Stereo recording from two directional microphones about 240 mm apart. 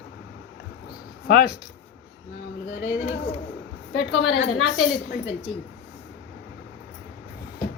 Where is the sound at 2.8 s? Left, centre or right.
Left.